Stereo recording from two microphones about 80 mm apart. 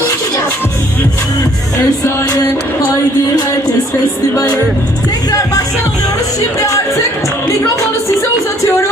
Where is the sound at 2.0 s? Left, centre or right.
Left.